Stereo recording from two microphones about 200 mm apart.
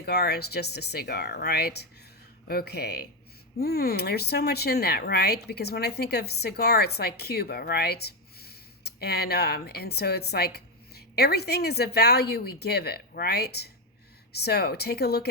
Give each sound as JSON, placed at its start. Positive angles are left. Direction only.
{"t": 0.0, "sound": "speech", "side_deg": 55}